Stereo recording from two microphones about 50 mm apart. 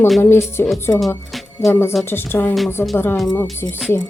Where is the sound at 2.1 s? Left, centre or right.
Left.